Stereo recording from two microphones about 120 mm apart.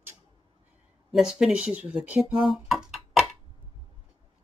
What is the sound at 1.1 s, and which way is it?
Speech, 5° right (ahead or behind).